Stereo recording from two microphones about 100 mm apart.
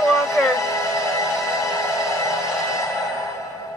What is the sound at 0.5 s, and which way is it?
Music, 35° left (ahead or behind).